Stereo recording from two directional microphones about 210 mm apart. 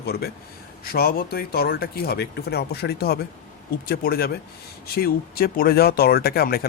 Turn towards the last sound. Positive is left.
turn(degrees=45)  # may be behind; listen again after turning